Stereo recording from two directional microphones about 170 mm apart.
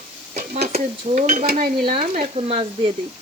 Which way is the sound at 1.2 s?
50° right (ahead or behind).